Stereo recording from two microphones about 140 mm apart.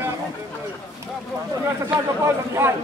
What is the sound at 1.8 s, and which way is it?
Speech, 20° right (ahead or behind).